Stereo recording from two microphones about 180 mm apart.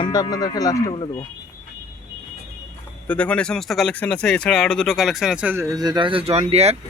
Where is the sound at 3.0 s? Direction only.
5° left (ahead or behind); by 6.8 s 35° right (ahead or behind).